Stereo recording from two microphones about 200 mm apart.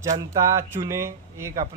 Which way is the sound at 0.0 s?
15° right (ahead or behind).